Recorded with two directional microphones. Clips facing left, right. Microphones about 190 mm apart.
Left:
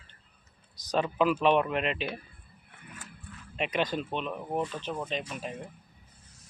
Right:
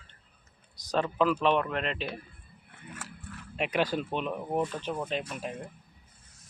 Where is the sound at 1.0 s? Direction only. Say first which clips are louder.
Left 1 dB; 15° left (ahead or behind).